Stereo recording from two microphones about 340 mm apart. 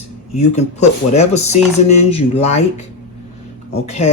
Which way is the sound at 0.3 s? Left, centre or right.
Centre.